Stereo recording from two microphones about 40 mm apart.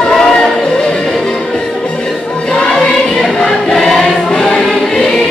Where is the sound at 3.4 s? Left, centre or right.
Centre.